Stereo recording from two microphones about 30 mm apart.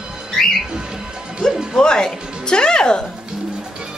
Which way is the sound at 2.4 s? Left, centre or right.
Left.